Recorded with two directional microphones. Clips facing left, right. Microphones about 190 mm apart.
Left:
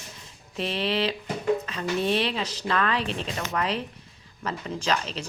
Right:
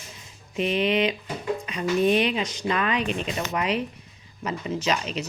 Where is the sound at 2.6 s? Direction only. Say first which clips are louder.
Even; 10° right (ahead or behind).